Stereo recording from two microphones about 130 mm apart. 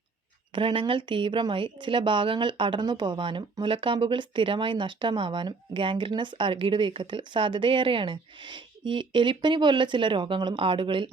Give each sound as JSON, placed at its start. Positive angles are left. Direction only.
{"t": 0.5, "sound": "speech", "side_deg": -40}